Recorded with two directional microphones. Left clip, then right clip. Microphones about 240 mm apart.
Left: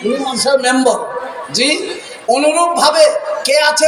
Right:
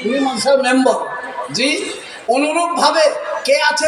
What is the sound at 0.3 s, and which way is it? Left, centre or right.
A man's voice, left.